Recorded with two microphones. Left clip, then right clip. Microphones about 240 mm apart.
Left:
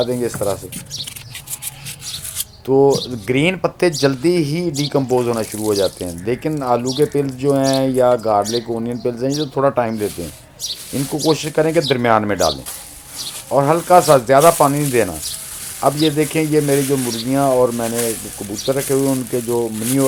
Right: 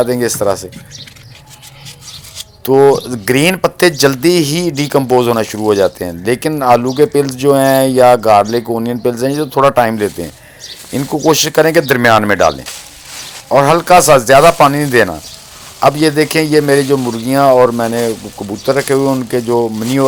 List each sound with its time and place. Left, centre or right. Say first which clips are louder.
0.0 s speech: right 6 dB; right
2.7 s speech: right 5 dB; right
13.6 s speech: right 5 dB; right